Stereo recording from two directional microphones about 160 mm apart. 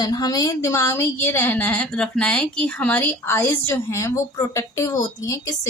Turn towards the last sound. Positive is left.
turn(degrees=20)  # may be behind; listen again after turning